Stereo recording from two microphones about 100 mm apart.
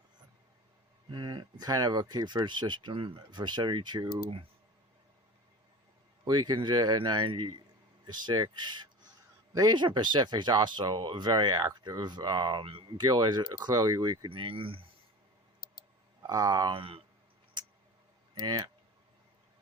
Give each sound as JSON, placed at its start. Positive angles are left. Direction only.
{"t": 1.1, "sound": "speech", "side_deg": -50}
{"t": 6.2, "sound": "speech", "side_deg": -45}
{"t": 14.3, "sound": "speech", "side_deg": -60}
{"t": 16.2, "sound": "speech", "side_deg": -40}
{"t": 16.7, "sound": "speech", "side_deg": -65}
{"t": 18.3, "sound": "speech", "side_deg": -45}